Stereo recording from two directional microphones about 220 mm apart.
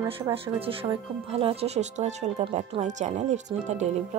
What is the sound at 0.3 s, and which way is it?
Speech, 25° right (ahead or behind).